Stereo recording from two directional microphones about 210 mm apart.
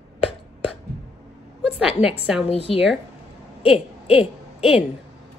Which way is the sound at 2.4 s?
30° left (ahead or behind).